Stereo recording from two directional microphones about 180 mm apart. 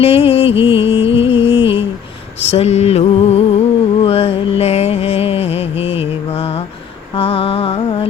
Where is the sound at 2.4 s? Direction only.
35° left (ahead or behind).